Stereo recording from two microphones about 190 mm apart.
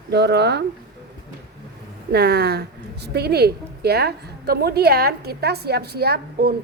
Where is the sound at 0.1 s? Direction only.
60° right (ahead or behind).